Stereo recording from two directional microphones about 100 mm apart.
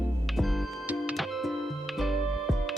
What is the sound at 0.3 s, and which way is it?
Music, centre (ahead or behind).